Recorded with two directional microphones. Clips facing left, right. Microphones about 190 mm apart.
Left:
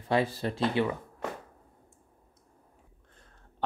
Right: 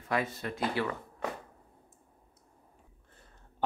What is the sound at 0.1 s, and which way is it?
Speech, 30° left (ahead or behind).